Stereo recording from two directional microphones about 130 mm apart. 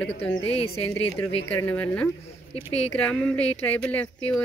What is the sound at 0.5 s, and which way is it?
Speech, 50° left (ahead or behind).